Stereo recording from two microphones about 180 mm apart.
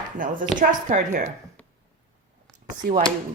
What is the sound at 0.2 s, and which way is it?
Speech, 50° right (ahead or behind).